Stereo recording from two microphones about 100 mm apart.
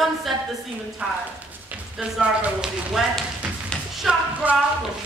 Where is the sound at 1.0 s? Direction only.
5° right (ahead or behind).